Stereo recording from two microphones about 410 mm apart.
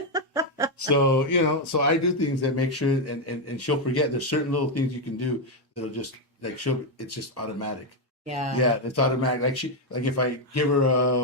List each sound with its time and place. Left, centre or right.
0.1 s a sound: centre
0.8 s speech: left
5.8 s speech: left